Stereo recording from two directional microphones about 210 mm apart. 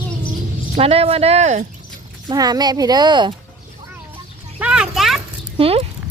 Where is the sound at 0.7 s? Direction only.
30° right (ahead or behind).